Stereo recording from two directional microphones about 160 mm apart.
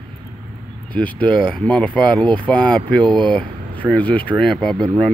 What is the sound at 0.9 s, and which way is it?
Speech, 10° left (ahead or behind).